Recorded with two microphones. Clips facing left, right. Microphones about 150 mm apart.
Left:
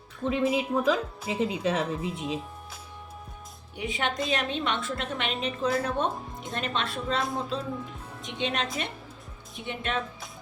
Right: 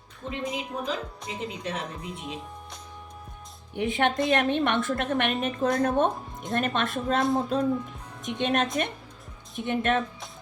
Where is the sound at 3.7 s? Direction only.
55° right (ahead or behind).